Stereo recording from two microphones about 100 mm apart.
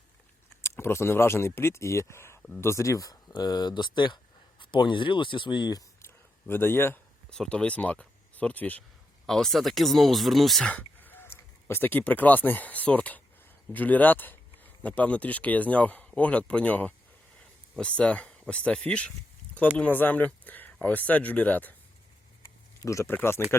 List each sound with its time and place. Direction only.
0.6 s speech: 25° left (ahead or behind); by 5.8 s 45° left (ahead or behind)
6.5 s speech: 20° left (ahead or behind)
7.3 s speech: 5° left (ahead or behind)
9.2 s speech: 5° left (ahead or behind)
10.7 s speech: 15° left (ahead or behind)
22.8 s speech: 30° left (ahead or behind)